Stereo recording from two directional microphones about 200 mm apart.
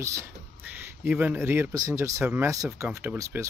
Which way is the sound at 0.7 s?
10° right (ahead or behind).